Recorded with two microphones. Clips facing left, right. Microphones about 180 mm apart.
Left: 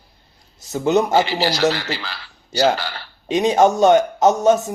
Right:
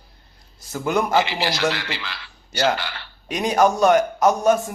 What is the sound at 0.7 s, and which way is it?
Speech, 25° left (ahead or behind).